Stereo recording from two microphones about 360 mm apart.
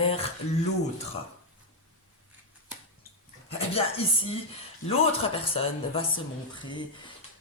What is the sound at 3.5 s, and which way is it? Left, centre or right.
Speech, centre.